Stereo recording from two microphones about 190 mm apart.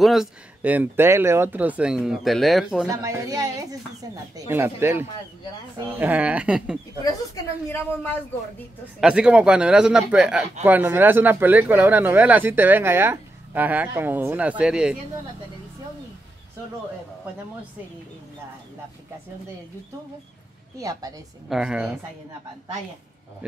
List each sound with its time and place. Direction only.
0.0 s speech: centre (ahead or behind)
2.9 s speech: 15° right (ahead or behind)
7.7 s a man's voice: 10° left (ahead or behind)
9.0 s speech: 5° right (ahead or behind)
20.7 s speech: 20° right (ahead or behind)
21.5 s speech: 5° right (ahead or behind)